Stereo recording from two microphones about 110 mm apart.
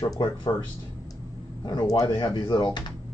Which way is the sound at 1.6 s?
40° left (ahead or behind).